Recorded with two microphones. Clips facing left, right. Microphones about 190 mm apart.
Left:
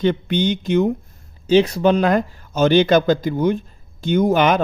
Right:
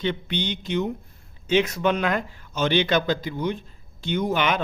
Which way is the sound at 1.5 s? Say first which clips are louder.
Left 7 dB; 35° left (ahead or behind).